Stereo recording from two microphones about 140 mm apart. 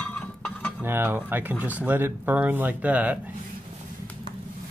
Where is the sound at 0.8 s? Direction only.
15° right (ahead or behind).